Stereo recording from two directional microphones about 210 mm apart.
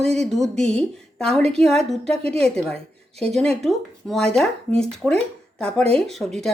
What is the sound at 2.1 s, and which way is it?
Speech, 30° right (ahead or behind).